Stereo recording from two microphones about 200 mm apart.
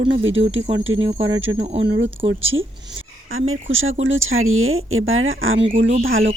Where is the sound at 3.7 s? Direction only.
80° right.